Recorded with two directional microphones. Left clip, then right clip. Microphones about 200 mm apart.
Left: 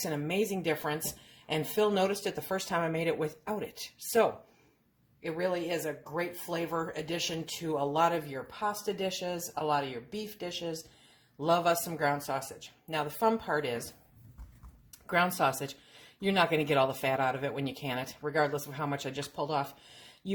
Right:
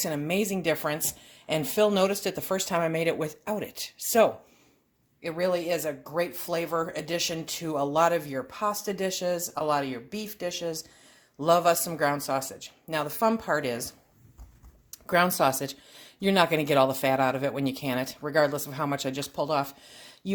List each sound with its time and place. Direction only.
0.0 s speech: 50° right (ahead or behind)
14.8 s speech: 45° right (ahead or behind)